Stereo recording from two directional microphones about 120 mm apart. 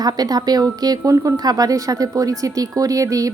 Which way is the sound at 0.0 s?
30° right (ahead or behind).